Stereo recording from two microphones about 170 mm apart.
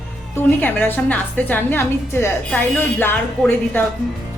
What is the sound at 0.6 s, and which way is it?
A woman's voice, 10° left (ahead or behind).